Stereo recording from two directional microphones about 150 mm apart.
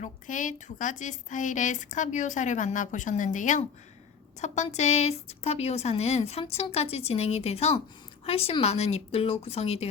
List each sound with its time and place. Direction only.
0.0 s a woman's voice: 60° left (ahead or behind); by 9.9 s 45° left (ahead or behind)